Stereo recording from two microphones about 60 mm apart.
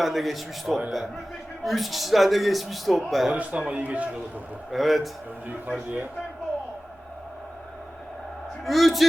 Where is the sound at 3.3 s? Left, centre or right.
Right.